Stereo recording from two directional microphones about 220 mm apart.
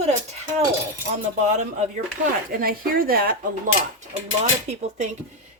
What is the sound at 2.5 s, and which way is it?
Speech, 40° right (ahead or behind).